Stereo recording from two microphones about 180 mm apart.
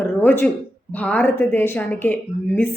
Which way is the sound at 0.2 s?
10° left (ahead or behind).